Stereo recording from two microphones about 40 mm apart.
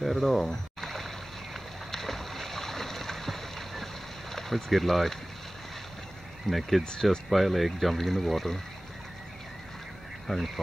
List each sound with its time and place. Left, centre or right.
0.0 s speech: centre
0.5 s a sound: centre
1.9 s boat: centre
6.4 s speech: centre
6.8 s speech: centre
7.2 s speech: centre
10.2 s speech: centre